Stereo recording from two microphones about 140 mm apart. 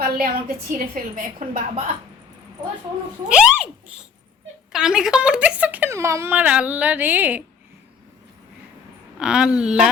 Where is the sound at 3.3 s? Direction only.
10° right (ahead or behind).